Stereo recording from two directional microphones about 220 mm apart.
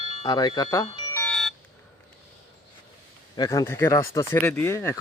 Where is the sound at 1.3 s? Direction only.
Centre (ahead or behind).